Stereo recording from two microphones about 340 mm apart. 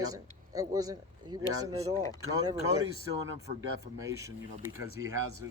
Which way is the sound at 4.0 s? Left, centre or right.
Centre.